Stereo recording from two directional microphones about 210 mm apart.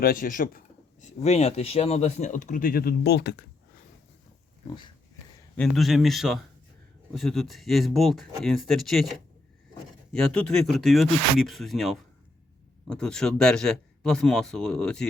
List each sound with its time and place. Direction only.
0.0 s speech: 40° left (ahead or behind)
5.5 s speech: centre (ahead or behind)